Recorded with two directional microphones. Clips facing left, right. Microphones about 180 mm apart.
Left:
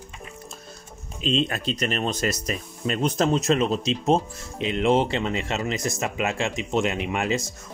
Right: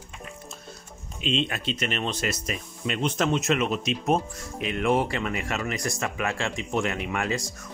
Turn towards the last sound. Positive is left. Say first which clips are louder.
# left 3 dB
turn(degrees=20)  # may be behind; listen again after turning